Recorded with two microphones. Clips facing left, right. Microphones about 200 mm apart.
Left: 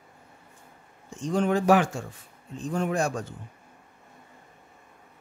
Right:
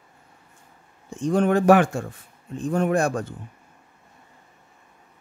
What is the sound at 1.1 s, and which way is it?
Speech, 55° right (ahead or behind).